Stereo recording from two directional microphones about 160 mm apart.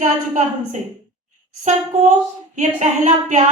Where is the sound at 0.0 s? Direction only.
50° right (ahead or behind).